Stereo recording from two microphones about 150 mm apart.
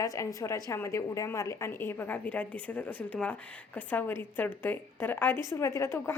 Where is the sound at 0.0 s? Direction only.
20° left (ahead or behind).